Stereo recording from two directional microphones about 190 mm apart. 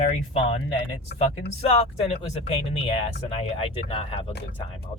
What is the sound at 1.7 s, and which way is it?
Speech, 30° left (ahead or behind).